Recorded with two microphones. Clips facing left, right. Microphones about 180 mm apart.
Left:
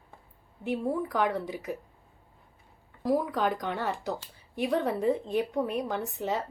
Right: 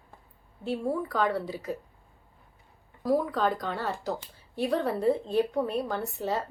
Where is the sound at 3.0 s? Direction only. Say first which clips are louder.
Right 1 dB; 20° left (ahead or behind).